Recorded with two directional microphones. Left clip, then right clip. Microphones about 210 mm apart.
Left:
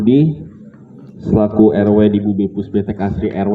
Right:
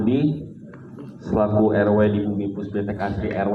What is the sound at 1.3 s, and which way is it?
A man's voice, 55° left (ahead or behind).